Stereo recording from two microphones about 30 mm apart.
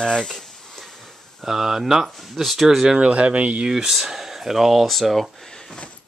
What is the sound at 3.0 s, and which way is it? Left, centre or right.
Speech, right.